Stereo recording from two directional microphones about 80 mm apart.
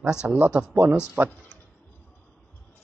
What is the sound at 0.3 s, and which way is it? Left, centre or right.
A man's voice, centre.